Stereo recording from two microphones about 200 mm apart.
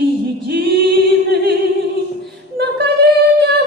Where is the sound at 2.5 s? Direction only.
55° right (ahead or behind).